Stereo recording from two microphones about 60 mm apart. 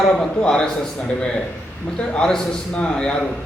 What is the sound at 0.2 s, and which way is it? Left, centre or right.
A man's voice, centre.